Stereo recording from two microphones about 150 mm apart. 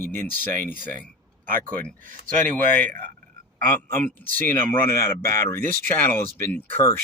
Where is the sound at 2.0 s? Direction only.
60° right (ahead or behind).